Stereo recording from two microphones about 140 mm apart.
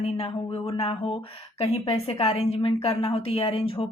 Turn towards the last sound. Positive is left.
turn(degrees=40)  # may be behind; listen again after turning